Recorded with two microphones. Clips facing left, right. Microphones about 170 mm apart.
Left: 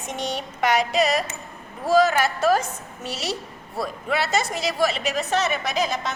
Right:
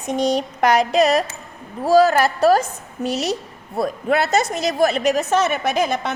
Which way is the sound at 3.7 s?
50° right (ahead or behind).